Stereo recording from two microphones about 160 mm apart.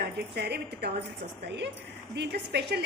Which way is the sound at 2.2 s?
90° right.